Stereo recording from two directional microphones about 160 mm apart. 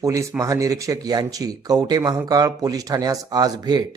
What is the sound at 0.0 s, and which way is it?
Speech, 20° right (ahead or behind).